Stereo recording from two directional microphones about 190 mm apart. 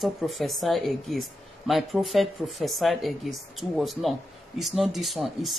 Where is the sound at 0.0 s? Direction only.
Centre (ahead or behind).